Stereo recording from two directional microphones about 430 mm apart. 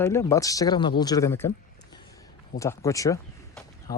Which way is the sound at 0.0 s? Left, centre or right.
Centre.